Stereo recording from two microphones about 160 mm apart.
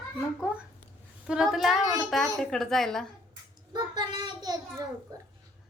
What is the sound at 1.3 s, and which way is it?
Speech, 5° right (ahead or behind).